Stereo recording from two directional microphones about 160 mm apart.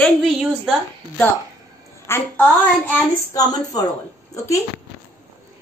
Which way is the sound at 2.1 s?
10° left (ahead or behind).